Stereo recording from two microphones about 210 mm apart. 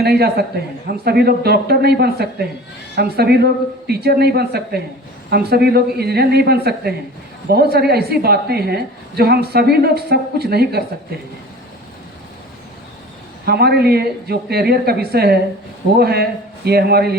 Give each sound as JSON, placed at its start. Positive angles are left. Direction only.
{"t": 0.0, "sound": "a woman's voice", "side_deg": -50}
{"t": 13.4, "sound": "a woman's voice", "side_deg": -50}